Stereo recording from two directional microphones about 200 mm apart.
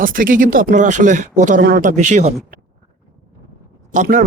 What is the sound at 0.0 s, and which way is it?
Speech, 45° right (ahead or behind).